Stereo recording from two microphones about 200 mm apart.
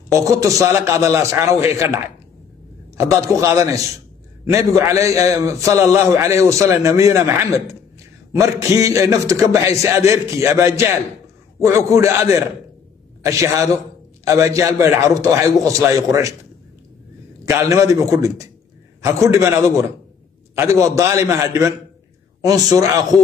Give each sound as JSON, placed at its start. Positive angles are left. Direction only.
{"t": 0.2, "sound": "a man's voice", "side_deg": -15}
{"t": 3.0, "sound": "a man's voice", "side_deg": -15}
{"t": 17.5, "sound": "a man's voice", "side_deg": -15}